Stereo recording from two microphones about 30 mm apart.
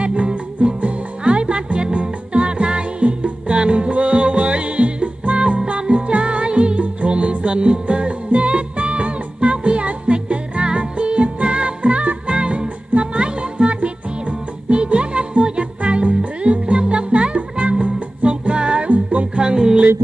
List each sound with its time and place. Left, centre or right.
0.0 s music: right
11.4 s music: right
11.8 s music: right
12.3 s music: right